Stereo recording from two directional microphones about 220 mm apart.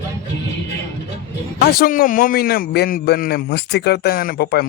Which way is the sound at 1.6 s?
40° left (ahead or behind).